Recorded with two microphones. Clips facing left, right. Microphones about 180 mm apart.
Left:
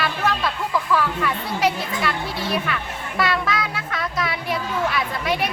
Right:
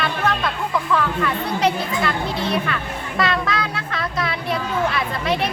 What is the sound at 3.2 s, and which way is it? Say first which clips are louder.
Child singing: right 1 dB; centre (ahead or behind).